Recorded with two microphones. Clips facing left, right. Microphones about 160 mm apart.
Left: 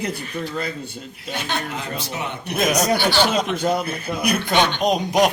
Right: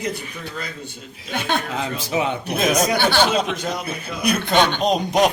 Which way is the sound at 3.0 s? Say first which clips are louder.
Right 1 dB; 55° right (ahead or behind).